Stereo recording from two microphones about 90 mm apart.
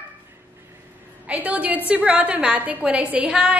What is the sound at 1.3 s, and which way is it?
A woman's voice, 15° right (ahead or behind).